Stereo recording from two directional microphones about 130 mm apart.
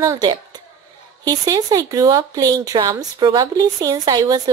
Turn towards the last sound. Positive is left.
turn(degrees=-30)  # may be behind; listen again after turning